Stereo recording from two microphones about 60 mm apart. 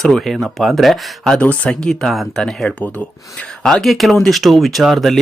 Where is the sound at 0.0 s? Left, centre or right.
Centre.